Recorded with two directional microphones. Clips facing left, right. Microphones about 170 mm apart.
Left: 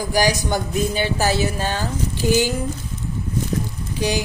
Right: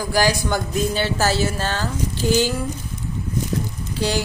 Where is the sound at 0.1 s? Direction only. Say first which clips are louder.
Even; 15° left (ahead or behind).